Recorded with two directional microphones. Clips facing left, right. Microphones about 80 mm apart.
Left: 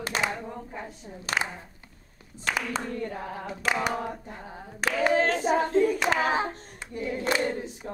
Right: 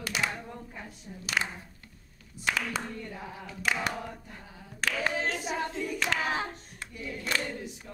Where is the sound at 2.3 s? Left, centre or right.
Left.